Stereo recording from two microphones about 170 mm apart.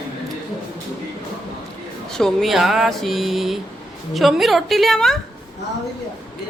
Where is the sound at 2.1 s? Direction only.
Centre (ahead or behind).